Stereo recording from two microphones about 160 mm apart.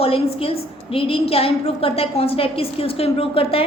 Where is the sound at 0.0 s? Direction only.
35° left (ahead or behind).